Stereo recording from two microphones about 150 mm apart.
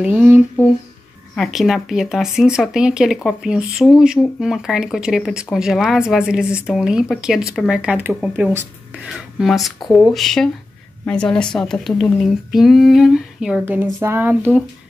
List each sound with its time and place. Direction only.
0.0 s a woman's voice: 10° right (ahead or behind)